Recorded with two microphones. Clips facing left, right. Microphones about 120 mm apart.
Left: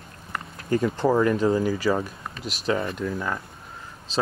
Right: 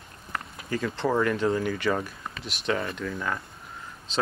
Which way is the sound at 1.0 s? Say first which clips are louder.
Left 3 dB; 25° left (ahead or behind).